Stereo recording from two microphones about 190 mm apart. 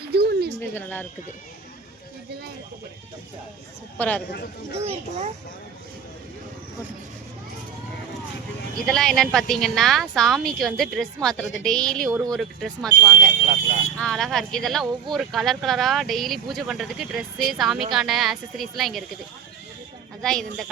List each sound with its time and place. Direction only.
0.1 s a sound: 60° right (ahead or behind)
0.7 s speech: 10° left (ahead or behind)
3.9 s speech: 10° left (ahead or behind)
4.7 s speech: 30° right (ahead or behind)
8.9 s speech: 5° left (ahead or behind)
13.4 s speech: 35° right (ahead or behind)
14.0 s speech: centre (ahead or behind)
20.2 s speech: centre (ahead or behind)